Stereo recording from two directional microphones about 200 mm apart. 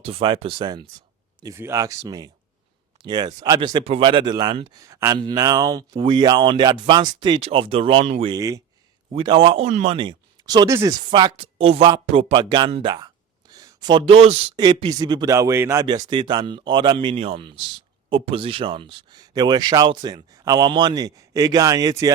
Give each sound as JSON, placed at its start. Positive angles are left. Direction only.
{"t": 0.0, "sound": "speech", "side_deg": -25}
{"t": 8.4, "sound": "speech", "side_deg": -15}